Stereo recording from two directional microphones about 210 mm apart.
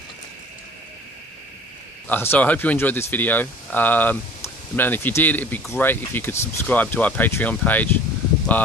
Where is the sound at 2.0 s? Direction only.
10° left (ahead or behind).